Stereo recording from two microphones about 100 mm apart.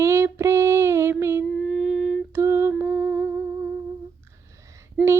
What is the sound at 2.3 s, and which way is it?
Lullaby, 25° right (ahead or behind).